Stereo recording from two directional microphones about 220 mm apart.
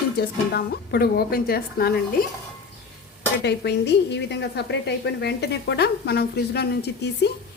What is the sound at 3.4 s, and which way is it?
A woman's voice, 50° left (ahead or behind).